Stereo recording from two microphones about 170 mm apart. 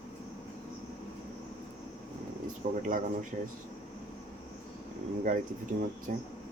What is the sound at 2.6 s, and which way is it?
Speech, 50° right (ahead or behind).